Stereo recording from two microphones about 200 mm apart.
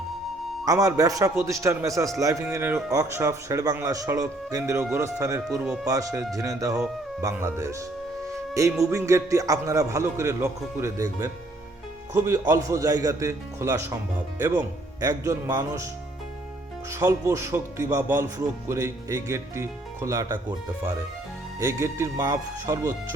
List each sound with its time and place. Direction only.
0.6 s speech: 15° right (ahead or behind)
8.8 s speech: 15° right (ahead or behind)
16.9 s speech: 15° right (ahead or behind)
21.6 s speech: 15° right (ahead or behind)